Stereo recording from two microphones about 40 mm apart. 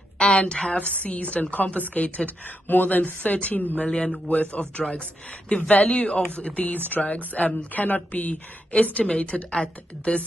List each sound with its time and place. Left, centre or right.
0.5 s speech: left
0.7 s a woman's voice: left
3.8 s a woman's voice: left
9.1 s speech: left